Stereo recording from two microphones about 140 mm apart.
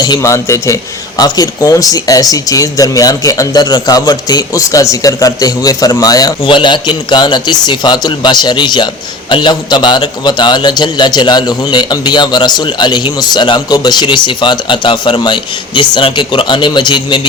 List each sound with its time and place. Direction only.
0.0 s a man's voice: 25° left (ahead or behind)